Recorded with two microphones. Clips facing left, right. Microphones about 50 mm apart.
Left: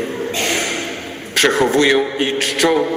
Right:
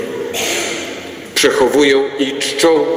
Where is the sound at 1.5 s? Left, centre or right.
Left.